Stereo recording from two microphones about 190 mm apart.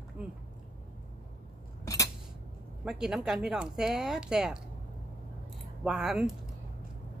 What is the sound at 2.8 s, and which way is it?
Speech, 5° right (ahead or behind).